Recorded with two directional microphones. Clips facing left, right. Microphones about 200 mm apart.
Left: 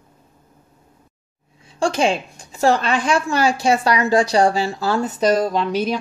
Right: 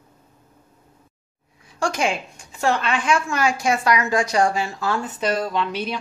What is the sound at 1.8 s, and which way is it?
Speech, 30° left (ahead or behind).